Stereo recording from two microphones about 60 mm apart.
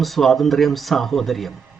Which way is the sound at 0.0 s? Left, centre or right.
Centre.